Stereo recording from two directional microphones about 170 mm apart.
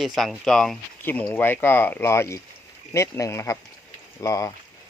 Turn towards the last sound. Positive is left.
turn(degrees=20)  # may be behind; listen again after turning